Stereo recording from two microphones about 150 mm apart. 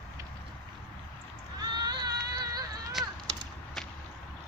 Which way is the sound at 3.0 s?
Centre (ahead or behind).